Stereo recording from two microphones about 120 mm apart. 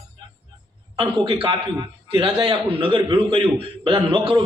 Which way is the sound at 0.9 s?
45° right (ahead or behind).